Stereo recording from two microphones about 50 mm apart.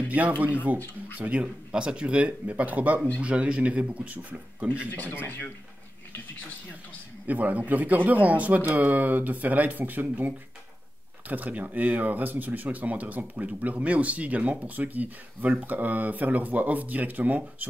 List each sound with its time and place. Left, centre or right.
0.1 s speech: right
0.7 s speech: left
1.2 s speech: right
5.1 s speech: left
7.2 s speech: right